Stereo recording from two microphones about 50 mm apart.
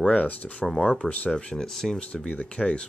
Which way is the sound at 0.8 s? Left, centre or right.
Centre.